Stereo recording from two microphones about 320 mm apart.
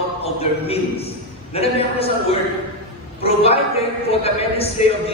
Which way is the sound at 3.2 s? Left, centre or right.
Centre.